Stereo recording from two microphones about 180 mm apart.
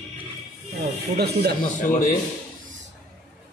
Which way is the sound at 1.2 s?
65° right (ahead or behind).